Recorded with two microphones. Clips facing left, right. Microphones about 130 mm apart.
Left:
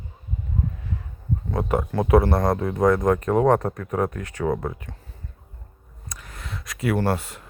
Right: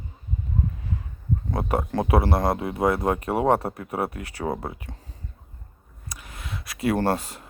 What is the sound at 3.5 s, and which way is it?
Speech, 30° right (ahead or behind).